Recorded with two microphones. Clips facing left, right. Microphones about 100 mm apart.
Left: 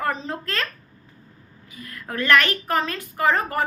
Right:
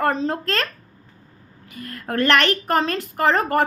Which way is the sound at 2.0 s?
60° right (ahead or behind).